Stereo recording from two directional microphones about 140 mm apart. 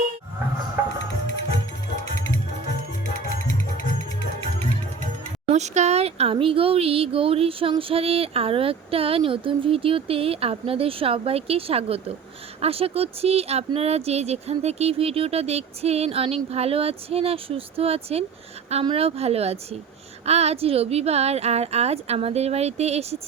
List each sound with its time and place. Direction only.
5.5 s speech: 55° right (ahead or behind)